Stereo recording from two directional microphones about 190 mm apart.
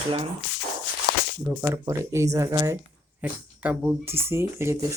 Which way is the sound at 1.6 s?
15° right (ahead or behind).